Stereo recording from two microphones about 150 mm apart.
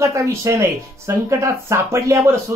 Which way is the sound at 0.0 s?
20° right (ahead or behind).